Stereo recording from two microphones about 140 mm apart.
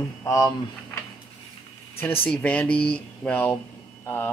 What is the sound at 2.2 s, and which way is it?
Speech, 10° left (ahead or behind).